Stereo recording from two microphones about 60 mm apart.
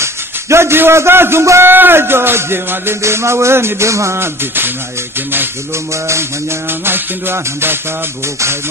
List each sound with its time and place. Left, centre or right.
0.0 s a man's voice: right
1.6 s music: right
6.8 s music: right